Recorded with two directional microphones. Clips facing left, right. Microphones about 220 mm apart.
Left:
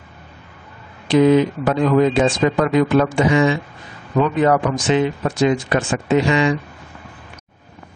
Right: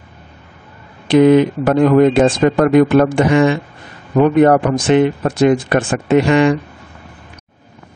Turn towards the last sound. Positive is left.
turn(degrees=-55)  # may be behind; listen again after turning